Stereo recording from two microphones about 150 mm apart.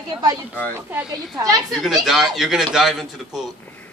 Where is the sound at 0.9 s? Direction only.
5° right (ahead or behind).